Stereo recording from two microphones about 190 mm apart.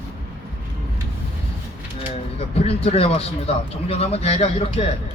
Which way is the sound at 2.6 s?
30° left (ahead or behind).